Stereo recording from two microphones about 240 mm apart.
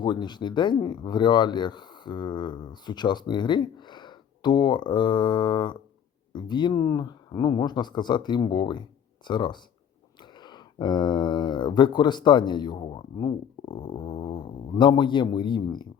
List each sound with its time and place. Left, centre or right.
0.0 s speech: centre